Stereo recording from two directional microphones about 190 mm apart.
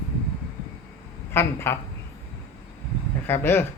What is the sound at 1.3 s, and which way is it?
Speech, 10° left (ahead or behind).